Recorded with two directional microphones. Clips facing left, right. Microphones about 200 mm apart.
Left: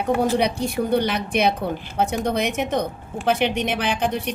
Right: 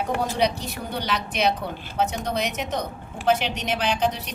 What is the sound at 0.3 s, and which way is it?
A woman's voice, 60° left (ahead or behind).